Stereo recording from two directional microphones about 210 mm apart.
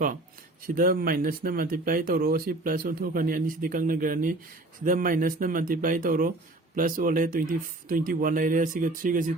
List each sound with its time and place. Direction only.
0.7 s speech: 45° right (ahead or behind)